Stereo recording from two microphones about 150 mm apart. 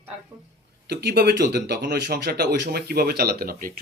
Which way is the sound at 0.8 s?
90° right.